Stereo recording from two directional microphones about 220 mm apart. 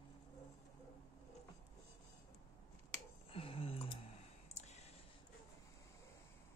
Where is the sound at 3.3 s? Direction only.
25° left (ahead or behind).